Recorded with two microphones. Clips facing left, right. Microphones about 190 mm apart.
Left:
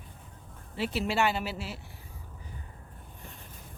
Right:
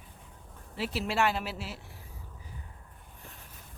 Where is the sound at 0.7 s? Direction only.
Centre (ahead or behind).